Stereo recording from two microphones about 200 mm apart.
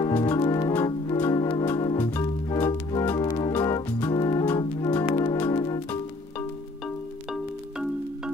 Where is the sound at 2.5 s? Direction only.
10° left (ahead or behind).